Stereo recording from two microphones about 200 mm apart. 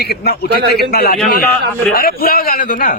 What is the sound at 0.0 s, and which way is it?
A man's voice, 50° left (ahead or behind).